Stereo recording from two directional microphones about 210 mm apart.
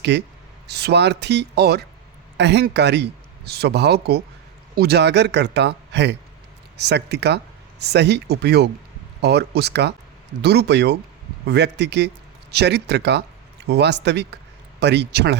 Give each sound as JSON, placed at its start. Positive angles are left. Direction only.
{"t": 0.1, "sound": "speech", "side_deg": -55}